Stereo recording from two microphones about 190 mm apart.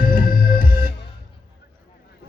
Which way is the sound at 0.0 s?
50° left (ahead or behind).